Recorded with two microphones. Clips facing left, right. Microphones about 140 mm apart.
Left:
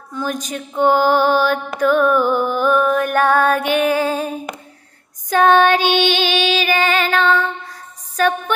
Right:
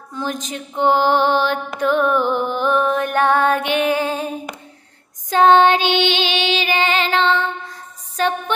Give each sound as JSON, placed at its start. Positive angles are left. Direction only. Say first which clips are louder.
{"t": 0.1, "sound": "mantra", "louder": "left 2 dB", "side_deg": -25}
{"t": 5.3, "sound": "mantra", "louder": "even", "side_deg": -20}
{"t": 8.2, "sound": "music", "louder": "left 2 dB", "side_deg": -20}